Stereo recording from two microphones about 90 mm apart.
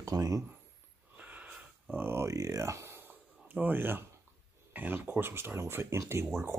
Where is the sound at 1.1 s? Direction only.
20° right (ahead or behind).